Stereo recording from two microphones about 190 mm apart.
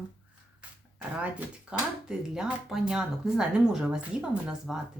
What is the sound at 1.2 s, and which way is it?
Speech, 5° right (ahead or behind).